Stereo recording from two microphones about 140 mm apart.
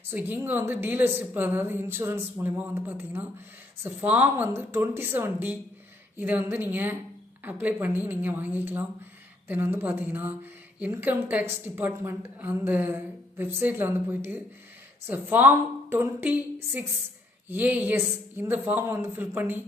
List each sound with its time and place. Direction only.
0.1 s speech: 15° right (ahead or behind)